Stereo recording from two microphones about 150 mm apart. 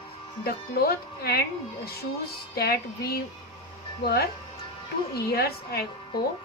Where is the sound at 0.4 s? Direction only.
90° left.